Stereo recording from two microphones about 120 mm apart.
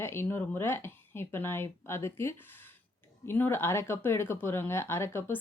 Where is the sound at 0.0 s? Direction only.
20° left (ahead or behind).